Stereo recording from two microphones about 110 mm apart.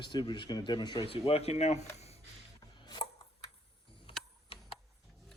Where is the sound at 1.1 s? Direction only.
65° left (ahead or behind); by 2.1 s 90° left.